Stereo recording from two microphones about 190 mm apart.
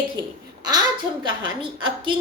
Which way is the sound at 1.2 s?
25° right (ahead or behind).